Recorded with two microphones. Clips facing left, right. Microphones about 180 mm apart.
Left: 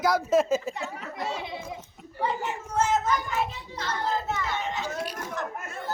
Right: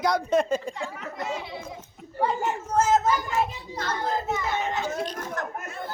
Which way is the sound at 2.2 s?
40° right (ahead or behind).